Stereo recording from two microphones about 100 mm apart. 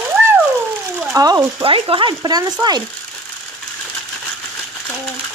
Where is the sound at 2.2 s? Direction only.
40° right (ahead or behind).